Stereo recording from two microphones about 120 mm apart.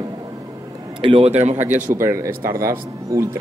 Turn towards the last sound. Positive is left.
turn(degrees=-25)  # may be behind; listen again after turning